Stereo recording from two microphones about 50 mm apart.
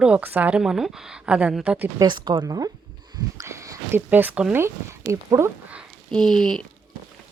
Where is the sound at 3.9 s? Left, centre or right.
Right.